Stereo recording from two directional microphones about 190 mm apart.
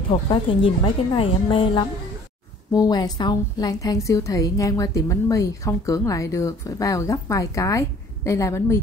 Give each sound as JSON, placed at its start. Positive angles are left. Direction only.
{"t": 0.1, "sound": "a woman's voice", "side_deg": 25}